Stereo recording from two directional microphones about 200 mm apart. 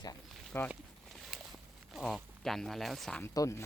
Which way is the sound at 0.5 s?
10° left (ahead or behind).